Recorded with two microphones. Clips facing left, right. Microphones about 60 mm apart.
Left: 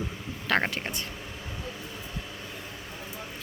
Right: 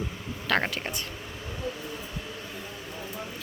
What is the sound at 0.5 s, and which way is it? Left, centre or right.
Speech, left.